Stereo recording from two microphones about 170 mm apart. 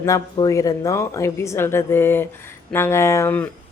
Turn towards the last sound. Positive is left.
turn(degrees=15)  # may be behind; listen again after turning